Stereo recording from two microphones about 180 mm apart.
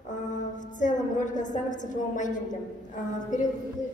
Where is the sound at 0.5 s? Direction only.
45° left (ahead or behind).